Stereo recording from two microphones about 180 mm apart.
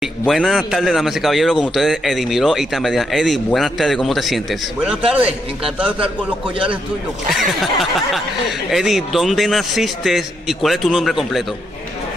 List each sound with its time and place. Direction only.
0.2 s a man's voice: centre (ahead or behind)
7.3 s a man's voice: centre (ahead or behind)